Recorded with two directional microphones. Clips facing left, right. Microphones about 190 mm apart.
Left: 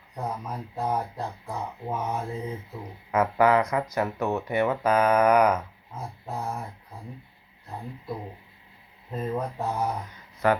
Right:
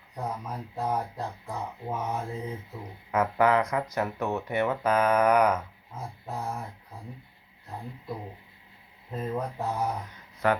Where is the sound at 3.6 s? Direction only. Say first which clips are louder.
Left 2 dB; 15° left (ahead or behind).